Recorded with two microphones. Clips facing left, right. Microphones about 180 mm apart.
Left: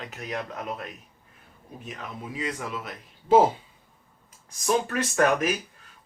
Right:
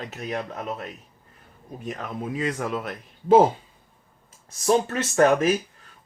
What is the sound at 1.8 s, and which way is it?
Speech, 50° right (ahead or behind).